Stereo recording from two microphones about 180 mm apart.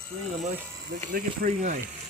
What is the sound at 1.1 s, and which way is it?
Speech, 50° right (ahead or behind).